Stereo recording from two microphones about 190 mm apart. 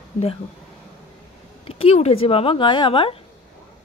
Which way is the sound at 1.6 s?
30° left (ahead or behind).